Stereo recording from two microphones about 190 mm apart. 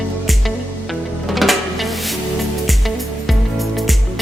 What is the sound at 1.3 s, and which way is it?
Music, centre (ahead or behind).